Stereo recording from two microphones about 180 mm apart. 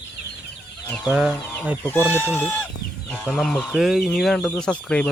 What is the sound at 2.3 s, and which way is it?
Speech, 10° left (ahead or behind).